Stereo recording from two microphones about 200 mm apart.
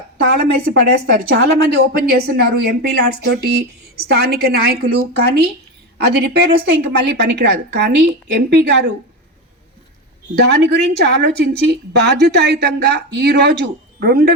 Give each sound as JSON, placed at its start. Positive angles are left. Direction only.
{"t": 0.3, "sound": "a woman's voice", "side_deg": -50}
{"t": 10.3, "sound": "a woman's voice", "side_deg": -55}